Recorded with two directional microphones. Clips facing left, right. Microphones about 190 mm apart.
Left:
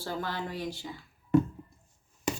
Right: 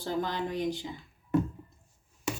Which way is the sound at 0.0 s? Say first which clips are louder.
Right 3 dB; 20° right (ahead or behind).